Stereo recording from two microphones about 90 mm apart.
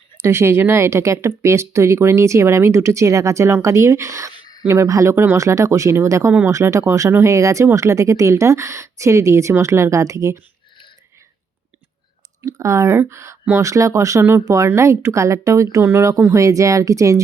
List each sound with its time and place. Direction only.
0.2 s speech: 30° right (ahead or behind)
12.4 s speech: 35° right (ahead or behind)